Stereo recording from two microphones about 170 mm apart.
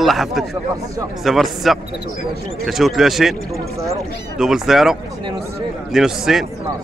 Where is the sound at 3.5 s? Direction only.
20° right (ahead or behind).